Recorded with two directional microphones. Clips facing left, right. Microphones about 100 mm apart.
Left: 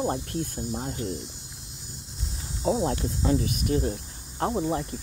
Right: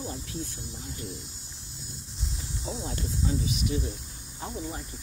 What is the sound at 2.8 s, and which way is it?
Speech, 80° left.